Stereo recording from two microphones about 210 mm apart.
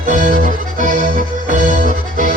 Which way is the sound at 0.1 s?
40° right (ahead or behind).